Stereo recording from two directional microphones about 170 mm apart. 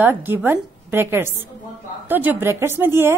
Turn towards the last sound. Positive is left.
turn(degrees=-15)  # may be behind; listen again after turning